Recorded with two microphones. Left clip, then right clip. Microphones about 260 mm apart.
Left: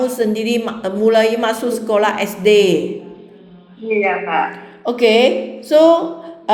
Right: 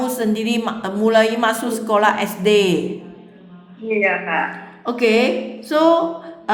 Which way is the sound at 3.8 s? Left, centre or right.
Centre.